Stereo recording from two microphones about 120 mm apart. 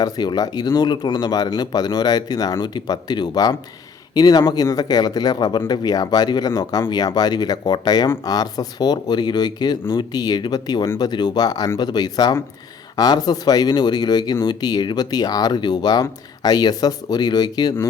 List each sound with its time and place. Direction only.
0.0 s speech: 35° left (ahead or behind)